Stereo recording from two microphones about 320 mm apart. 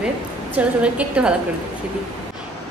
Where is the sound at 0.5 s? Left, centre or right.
Centre.